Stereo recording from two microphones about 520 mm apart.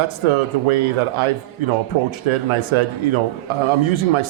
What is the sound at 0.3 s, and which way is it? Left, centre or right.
A man's voice, right.